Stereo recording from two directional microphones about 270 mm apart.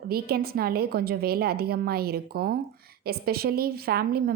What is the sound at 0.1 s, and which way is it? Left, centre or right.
A woman's voice, right.